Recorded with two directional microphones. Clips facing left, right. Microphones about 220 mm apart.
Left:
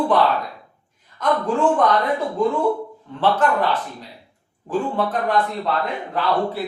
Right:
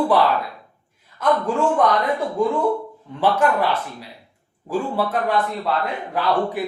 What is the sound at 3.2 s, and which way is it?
A man's voice, 10° right (ahead or behind).